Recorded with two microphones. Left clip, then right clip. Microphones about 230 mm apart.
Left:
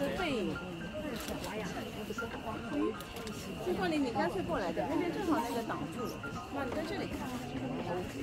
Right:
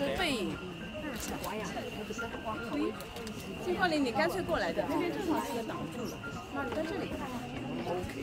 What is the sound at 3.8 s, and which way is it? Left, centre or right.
Speech, right.